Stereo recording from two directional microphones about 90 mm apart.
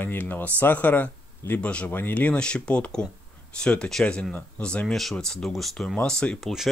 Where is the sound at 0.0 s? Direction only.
20° left (ahead or behind).